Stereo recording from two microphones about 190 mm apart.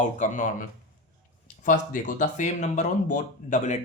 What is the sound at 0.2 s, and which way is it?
Speech, 45° left (ahead or behind).